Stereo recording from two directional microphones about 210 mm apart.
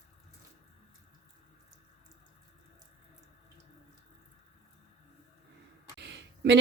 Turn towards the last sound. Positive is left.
turn(degrees=-55)  # may be behind; listen again after turning